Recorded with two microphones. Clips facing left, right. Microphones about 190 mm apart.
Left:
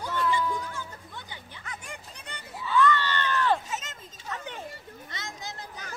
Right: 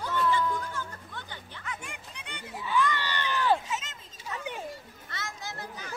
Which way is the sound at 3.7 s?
40° left (ahead or behind).